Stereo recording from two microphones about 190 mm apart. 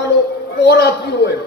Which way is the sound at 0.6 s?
60° left (ahead or behind).